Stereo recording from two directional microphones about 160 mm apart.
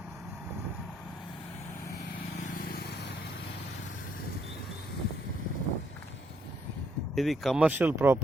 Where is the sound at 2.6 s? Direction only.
75° left (ahead or behind); by 3.1 s 90° left.